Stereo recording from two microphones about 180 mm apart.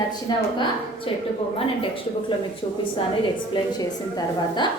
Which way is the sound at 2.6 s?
35° left (ahead or behind).